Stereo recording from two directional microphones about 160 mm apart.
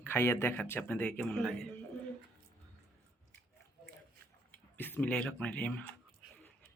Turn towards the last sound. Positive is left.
turn(degrees=5)  # may be behind; listen again after turning